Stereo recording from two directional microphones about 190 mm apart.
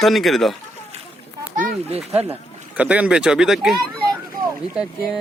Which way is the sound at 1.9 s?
35° right (ahead or behind).